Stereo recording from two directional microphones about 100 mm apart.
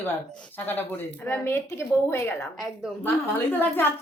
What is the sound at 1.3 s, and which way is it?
A woman's voice, 25° left (ahead or behind).